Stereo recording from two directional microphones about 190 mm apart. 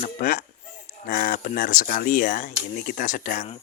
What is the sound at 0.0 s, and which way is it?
Speech, 45° left (ahead or behind).